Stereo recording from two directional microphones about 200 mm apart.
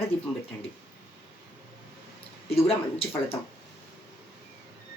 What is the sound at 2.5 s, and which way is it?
Speech, 30° left (ahead or behind).